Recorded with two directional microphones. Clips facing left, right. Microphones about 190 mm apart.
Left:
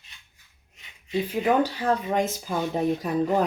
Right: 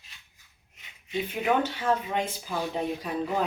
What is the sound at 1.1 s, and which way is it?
Speech, 35° left (ahead or behind).